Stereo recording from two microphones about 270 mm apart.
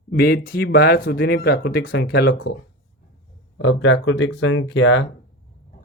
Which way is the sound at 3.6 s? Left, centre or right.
Left.